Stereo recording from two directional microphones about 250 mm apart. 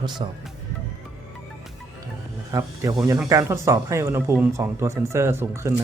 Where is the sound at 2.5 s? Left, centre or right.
Centre.